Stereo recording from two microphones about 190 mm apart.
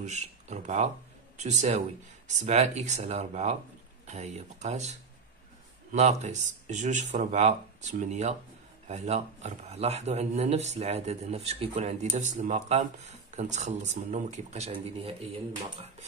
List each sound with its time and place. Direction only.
0.0 s speech: 40° right (ahead or behind)